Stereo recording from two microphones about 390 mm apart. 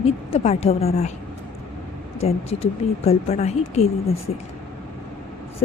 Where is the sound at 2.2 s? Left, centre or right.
Centre.